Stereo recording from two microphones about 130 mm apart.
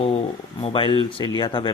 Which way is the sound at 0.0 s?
50° left (ahead or behind).